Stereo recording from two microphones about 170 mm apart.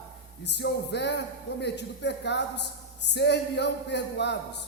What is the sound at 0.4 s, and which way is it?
Music, 90° left.